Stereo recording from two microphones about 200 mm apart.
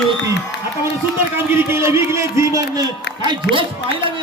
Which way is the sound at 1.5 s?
10° right (ahead or behind).